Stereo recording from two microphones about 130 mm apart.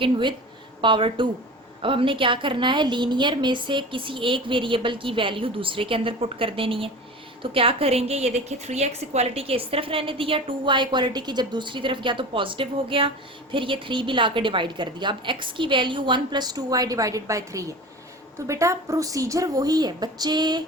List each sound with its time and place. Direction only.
0.0 s a woman's voice: 35° right (ahead or behind)